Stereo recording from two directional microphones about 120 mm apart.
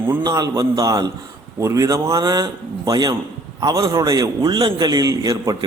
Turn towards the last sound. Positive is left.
turn(degrees=-30)  # may be behind; listen again after turning